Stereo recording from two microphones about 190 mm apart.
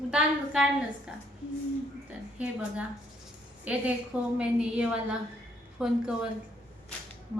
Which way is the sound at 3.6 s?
5° right (ahead or behind).